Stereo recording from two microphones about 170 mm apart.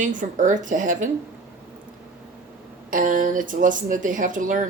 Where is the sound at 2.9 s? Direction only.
50° right (ahead or behind).